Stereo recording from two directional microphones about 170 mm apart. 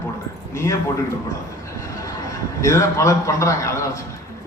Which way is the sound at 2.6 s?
20° left (ahead or behind).